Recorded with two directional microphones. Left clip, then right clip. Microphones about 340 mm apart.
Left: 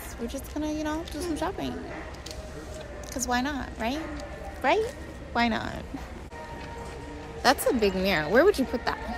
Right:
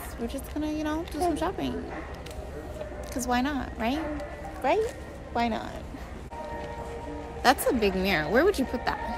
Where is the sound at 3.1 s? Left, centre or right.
Centre.